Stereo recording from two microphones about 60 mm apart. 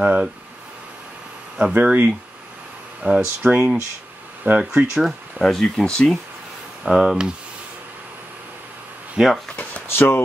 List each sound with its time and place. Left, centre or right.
0.0 s speech: centre
1.6 s speech: centre
5.4 s speech: centre
6.8 s speech: centre
9.2 s speech: centre
9.8 s speech: left